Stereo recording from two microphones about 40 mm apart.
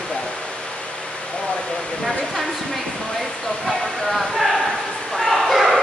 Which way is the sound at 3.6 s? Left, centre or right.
Centre.